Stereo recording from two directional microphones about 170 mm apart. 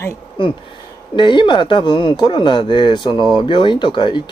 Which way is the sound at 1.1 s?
25° left (ahead or behind).